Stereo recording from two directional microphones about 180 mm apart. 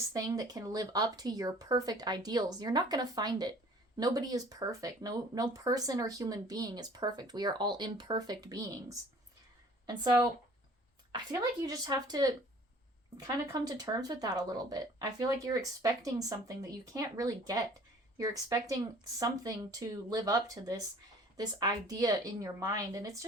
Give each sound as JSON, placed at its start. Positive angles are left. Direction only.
{"t": 0.1, "sound": "a woman's voice", "side_deg": -20}